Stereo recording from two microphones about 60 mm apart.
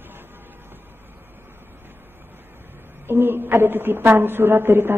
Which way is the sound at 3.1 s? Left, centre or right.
Right.